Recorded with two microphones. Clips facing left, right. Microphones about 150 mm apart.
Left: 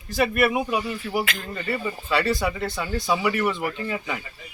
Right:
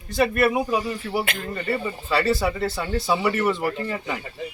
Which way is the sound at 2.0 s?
Centre (ahead or behind).